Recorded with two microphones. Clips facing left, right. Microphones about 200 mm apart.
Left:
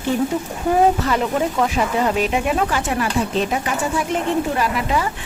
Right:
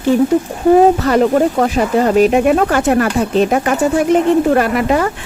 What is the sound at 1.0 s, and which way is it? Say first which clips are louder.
Speech: right 8 dB; 50° right (ahead or behind).